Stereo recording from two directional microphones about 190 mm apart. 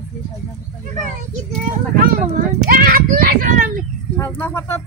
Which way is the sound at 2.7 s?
50° right (ahead or behind).